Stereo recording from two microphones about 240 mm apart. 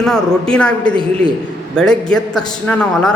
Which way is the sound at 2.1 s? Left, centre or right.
Centre.